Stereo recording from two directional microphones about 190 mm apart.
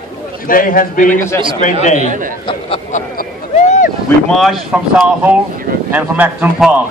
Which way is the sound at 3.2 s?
45° left (ahead or behind).